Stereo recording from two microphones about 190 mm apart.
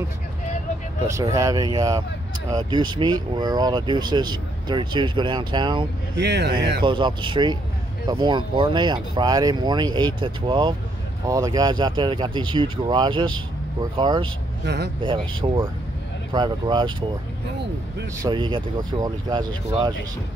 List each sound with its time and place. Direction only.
1.0 s speech: 15° right (ahead or behind)
6.1 s speech: 65° right (ahead or behind)
6.8 s speech: 25° right (ahead or behind)
14.6 s speech: 60° right (ahead or behind)
15.0 s speech: 25° right (ahead or behind)
18.2 s speech: 25° right (ahead or behind)